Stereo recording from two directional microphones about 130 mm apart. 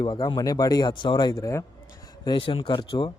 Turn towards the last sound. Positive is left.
turn(degrees=35)  # may be behind; listen again after turning